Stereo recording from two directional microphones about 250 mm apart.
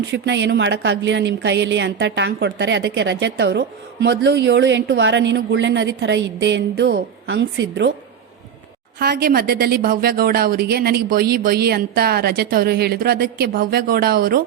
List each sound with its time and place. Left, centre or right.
0.1 s a woman's voice: right
9.0 s a woman's voice: right